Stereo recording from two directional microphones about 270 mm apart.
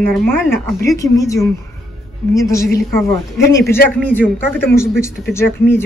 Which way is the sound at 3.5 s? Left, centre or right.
Left.